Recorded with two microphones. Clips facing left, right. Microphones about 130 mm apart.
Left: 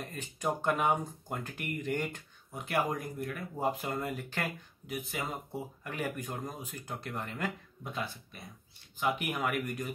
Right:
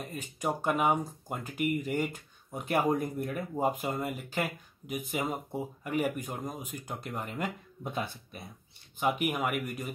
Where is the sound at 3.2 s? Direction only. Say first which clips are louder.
Right 3 dB; 20° right (ahead or behind).